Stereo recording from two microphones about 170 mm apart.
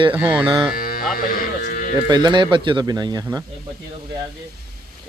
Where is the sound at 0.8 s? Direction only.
60° left (ahead or behind).